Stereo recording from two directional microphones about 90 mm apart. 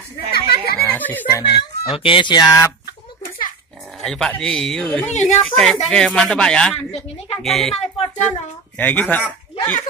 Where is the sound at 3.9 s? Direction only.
5° left (ahead or behind).